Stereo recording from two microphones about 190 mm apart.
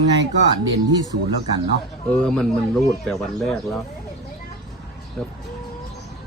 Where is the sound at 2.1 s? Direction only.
5° left (ahead or behind).